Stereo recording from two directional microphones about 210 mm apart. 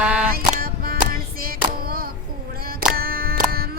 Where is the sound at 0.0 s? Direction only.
5° right (ahead or behind).